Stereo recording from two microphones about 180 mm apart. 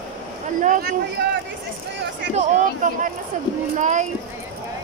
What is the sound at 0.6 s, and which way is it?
Speech, 55° right (ahead or behind).